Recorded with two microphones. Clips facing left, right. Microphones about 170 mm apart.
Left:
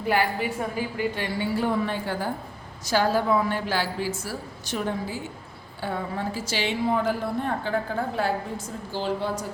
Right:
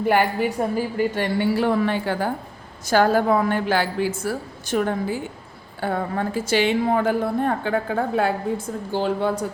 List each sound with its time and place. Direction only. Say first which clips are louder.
0.0 s a woman's voice: right 5 dB; 55° right (ahead or behind)
1.5 s a woman's voice: right 5 dB; 75° right (ahead or behind)
2.8 s a woman's voice: right 5 dB; 55° right (ahead or behind)